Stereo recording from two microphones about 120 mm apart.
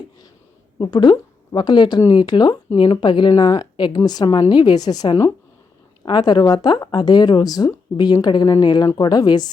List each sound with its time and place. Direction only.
0.8 s a woman's voice: 40° left (ahead or behind)